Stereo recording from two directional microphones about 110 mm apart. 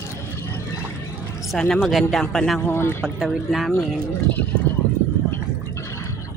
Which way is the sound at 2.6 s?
20° left (ahead or behind).